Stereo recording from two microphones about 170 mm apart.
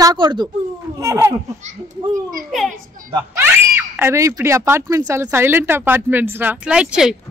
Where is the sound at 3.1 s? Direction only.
10° right (ahead or behind).